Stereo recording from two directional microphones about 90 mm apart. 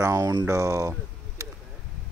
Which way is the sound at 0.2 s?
55° right (ahead or behind).